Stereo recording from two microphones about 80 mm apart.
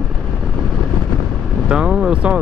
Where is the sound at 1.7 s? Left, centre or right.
Centre.